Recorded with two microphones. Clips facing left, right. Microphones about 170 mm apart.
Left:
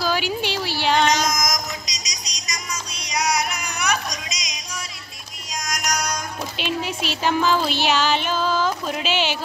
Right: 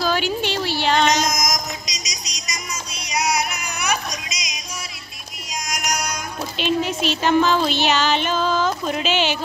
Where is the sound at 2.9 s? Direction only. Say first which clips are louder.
Right 1 dB; 5° right (ahead or behind).